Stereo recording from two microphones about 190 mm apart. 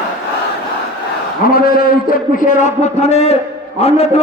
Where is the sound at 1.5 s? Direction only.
50° left (ahead or behind); by 4.2 s 35° left (ahead or behind).